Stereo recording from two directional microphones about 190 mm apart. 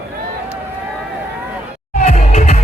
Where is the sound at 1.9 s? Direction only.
35° left (ahead or behind).